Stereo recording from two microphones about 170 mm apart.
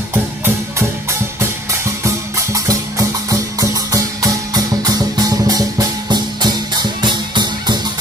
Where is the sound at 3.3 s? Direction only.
20° right (ahead or behind).